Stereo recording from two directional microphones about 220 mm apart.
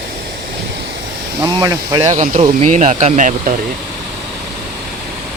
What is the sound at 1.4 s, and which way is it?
Speech, 15° right (ahead or behind).